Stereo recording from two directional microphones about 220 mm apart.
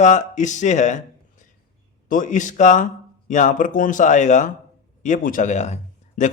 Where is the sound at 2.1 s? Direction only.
35° left (ahead or behind).